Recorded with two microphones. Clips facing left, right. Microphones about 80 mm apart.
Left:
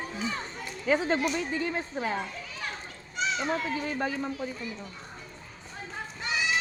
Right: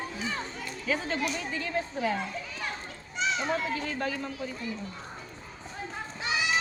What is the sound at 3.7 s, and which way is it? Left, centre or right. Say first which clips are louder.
Speech: left 1 dB; centre.